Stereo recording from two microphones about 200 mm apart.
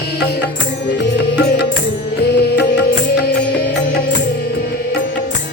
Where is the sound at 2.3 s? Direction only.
55° left (ahead or behind).